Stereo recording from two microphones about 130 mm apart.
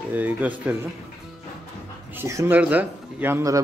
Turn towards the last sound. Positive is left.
turn(degrees=-20)  # may be behind; listen again after turning